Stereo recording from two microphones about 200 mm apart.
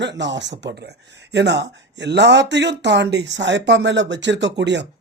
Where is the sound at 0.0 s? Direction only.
60° right (ahead or behind).